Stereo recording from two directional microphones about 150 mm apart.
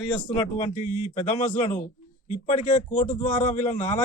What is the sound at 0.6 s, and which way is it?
A man's voice, 50° left (ahead or behind).